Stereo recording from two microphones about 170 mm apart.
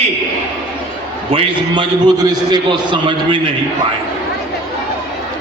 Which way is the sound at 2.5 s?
25° right (ahead or behind).